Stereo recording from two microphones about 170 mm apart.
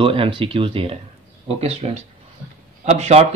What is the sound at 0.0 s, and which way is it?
Speech, 30° right (ahead or behind).